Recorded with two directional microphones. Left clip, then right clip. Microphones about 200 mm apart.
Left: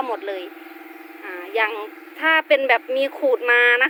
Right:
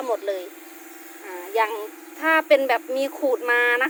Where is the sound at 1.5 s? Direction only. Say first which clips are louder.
Left 1 dB; 5° right (ahead or behind).